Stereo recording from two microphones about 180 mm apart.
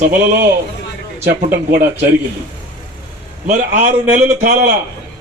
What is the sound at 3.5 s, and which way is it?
A man's voice, 40° right (ahead or behind).